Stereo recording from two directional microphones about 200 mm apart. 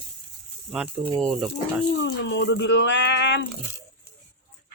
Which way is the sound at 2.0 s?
60° left (ahead or behind).